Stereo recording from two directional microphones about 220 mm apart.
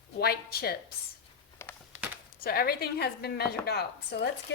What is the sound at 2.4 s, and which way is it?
A woman's voice, 45° left (ahead or behind).